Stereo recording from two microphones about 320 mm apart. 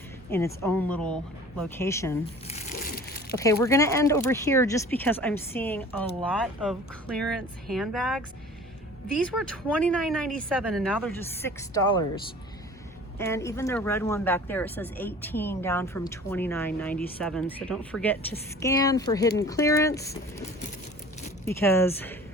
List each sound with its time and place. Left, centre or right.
0.3 s speech: centre
2.5 s a sound: left
3.3 s speech: centre
9.4 s speech: centre
13.1 s speech: centre
21.4 s speech: centre